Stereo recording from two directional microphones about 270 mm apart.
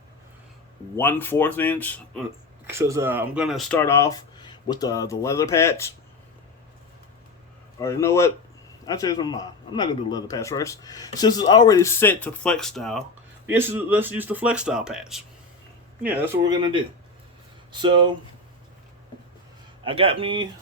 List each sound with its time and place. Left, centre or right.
0.9 s speech: centre
2.6 s speech: centre
7.8 s speech: centre
19.8 s speech: centre